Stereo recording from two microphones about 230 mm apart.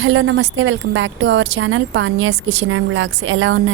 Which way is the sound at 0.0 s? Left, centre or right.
Right.